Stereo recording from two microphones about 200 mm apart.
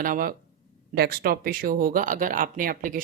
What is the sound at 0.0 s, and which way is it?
Speech, 45° right (ahead or behind).